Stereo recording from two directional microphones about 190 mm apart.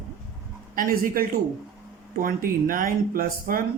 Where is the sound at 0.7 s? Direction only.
50° right (ahead or behind).